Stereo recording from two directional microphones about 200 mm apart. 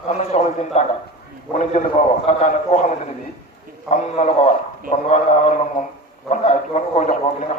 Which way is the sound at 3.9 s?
35° left (ahead or behind).